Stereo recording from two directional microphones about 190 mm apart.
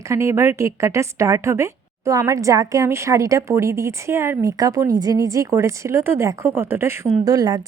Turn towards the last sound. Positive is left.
turn(degrees=-20)  # may be behind; listen again after turning